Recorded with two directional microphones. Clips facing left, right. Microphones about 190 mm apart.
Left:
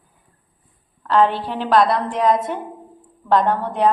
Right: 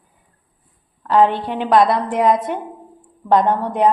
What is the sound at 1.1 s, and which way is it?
Speech, 15° right (ahead or behind).